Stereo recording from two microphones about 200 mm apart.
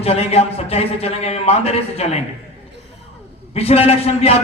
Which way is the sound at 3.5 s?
30° left (ahead or behind).